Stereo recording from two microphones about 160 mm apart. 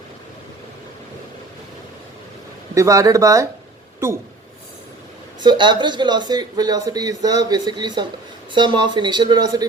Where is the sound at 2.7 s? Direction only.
20° right (ahead or behind).